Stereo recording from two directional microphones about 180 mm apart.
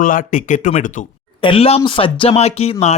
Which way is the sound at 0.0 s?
50° left (ahead or behind).